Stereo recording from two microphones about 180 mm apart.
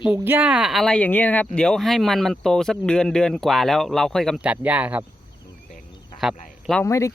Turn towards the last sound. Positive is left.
turn(degrees=15)  # may be behind; listen again after turning